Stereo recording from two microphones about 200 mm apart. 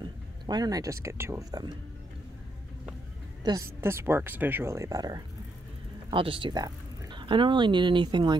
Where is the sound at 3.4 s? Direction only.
15° right (ahead or behind).